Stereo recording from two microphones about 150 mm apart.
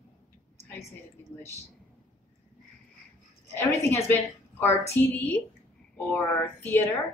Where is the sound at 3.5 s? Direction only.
15° left (ahead or behind).